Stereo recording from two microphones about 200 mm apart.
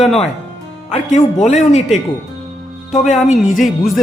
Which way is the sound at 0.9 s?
35° left (ahead or behind).